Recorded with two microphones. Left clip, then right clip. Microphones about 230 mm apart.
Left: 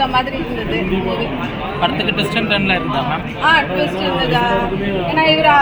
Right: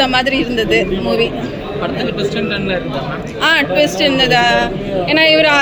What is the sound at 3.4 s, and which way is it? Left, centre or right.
Speech, right.